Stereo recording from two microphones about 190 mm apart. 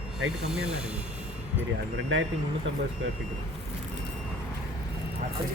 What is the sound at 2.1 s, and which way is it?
Speech, 90° right.